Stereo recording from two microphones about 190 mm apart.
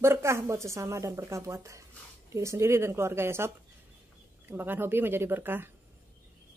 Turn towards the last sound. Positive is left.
turn(degrees=-10)  # may be behind; listen again after turning